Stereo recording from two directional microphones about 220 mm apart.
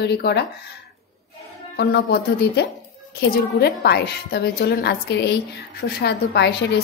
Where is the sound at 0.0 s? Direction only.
50° left (ahead or behind).